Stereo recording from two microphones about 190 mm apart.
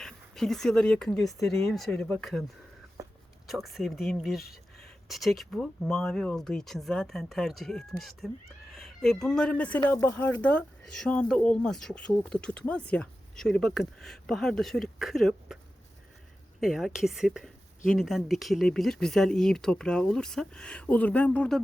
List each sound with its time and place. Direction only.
0.0 s speech: centre (ahead or behind)
3.0 s a sound: 15° right (ahead or behind)
3.5 s speech: centre (ahead or behind)
16.6 s speech: centre (ahead or behind)